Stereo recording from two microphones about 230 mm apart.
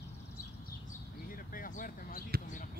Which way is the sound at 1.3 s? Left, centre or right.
Left.